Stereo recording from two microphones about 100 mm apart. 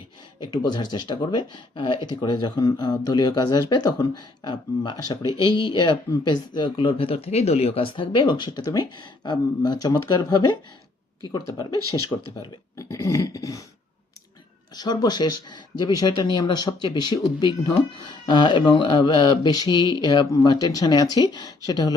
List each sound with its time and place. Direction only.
0.3 s speech: 45° left (ahead or behind)
11.3 s a sound: 40° left (ahead or behind)
14.8 s speech: 45° left (ahead or behind)